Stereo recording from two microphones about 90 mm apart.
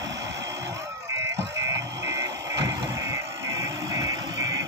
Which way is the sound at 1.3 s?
35° right (ahead or behind).